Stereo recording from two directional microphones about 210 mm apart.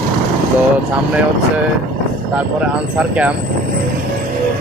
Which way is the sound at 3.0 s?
5° right (ahead or behind).